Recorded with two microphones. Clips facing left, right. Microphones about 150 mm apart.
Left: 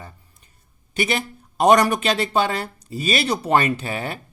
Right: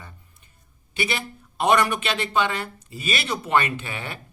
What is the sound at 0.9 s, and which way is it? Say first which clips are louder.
Speech: left 4 dB; 45° left (ahead or behind).